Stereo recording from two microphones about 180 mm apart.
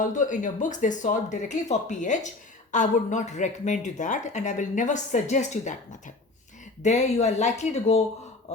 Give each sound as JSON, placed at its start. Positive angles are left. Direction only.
{"t": 0.0, "sound": "speech", "side_deg": 45}
{"t": 6.8, "sound": "speech", "side_deg": 40}